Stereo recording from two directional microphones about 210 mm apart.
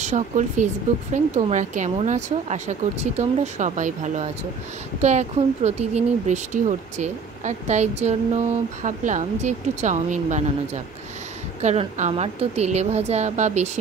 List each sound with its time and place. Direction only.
0.0 s speech: 35° right (ahead or behind)